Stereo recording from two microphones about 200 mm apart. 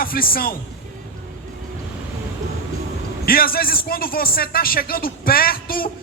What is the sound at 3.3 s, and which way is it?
A man's voice, 45° left (ahead or behind).